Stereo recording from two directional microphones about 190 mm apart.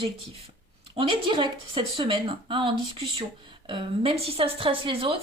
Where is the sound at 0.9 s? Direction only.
25° right (ahead or behind).